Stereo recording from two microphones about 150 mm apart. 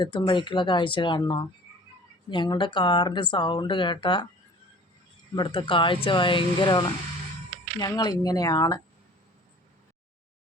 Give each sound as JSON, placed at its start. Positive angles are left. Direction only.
{"t": 0.0, "sound": "speech", "side_deg": 30}
{"t": 5.3, "sound": "speech", "side_deg": 30}